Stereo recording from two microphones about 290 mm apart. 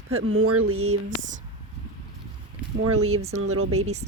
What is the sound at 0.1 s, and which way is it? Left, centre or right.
Speech, right.